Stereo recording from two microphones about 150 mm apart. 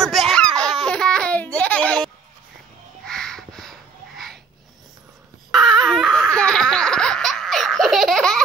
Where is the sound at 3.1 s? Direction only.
5° left (ahead or behind).